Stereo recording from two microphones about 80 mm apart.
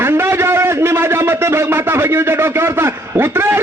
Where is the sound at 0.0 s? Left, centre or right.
Right.